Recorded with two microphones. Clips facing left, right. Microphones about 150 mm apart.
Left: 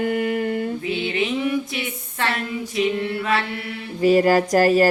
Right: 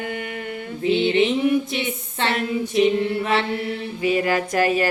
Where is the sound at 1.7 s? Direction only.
25° right (ahead or behind).